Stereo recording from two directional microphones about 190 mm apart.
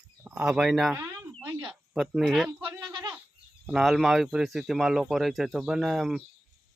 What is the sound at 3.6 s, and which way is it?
Speech, centre (ahead or behind).